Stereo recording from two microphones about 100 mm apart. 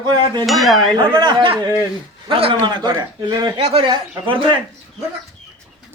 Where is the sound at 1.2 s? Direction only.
50° right (ahead or behind).